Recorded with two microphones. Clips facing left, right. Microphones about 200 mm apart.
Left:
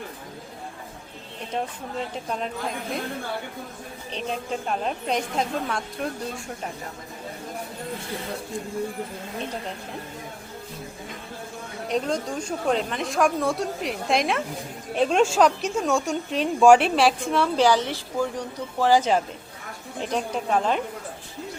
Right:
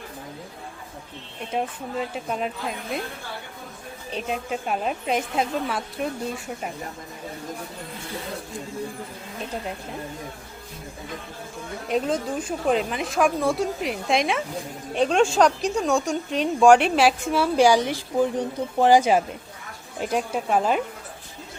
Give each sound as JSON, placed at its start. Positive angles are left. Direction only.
{"t": 1.5, "sound": "a woman's voice", "side_deg": -5}
{"t": 4.1, "sound": "a woman's voice", "side_deg": -5}
{"t": 11.9, "sound": "a woman's voice", "side_deg": -5}